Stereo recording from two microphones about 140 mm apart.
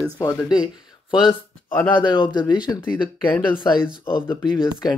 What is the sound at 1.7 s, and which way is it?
Speech, 15° left (ahead or behind).